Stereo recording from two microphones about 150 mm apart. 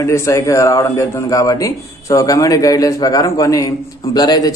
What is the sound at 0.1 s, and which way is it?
A man's voice, 20° left (ahead or behind).